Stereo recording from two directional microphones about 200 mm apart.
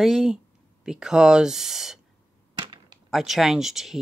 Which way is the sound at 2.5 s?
20° right (ahead or behind).